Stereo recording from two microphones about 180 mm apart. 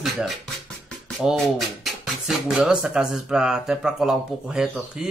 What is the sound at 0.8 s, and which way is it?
Music, 5° left (ahead or behind).